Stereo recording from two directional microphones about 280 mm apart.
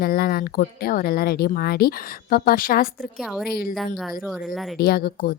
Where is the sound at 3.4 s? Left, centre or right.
Left.